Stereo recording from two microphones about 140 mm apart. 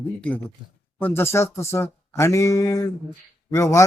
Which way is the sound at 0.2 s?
10° left (ahead or behind).